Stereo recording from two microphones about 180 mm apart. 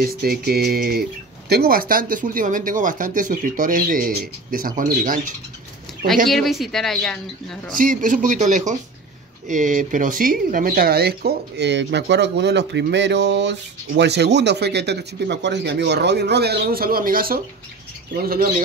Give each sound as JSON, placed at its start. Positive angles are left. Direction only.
{"t": 0.0, "sound": "speech", "side_deg": -55}
{"t": 6.2, "sound": "a woman's voice", "side_deg": 0}
{"t": 7.7, "sound": "speech", "side_deg": -50}